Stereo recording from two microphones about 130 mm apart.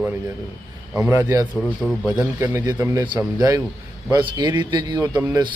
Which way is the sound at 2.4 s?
25° right (ahead or behind).